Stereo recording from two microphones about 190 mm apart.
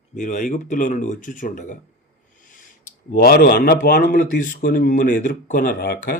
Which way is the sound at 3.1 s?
50° left (ahead or behind).